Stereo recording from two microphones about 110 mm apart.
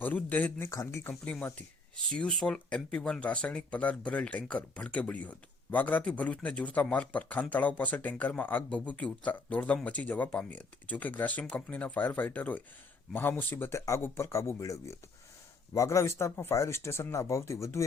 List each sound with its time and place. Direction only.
0.0 s a man's voice: 15° left (ahead or behind)
0.7 s speech: 30° left (ahead or behind)
1.1 s a man's voice: 10° left (ahead or behind); by 17.8 s 25° left (ahead or behind)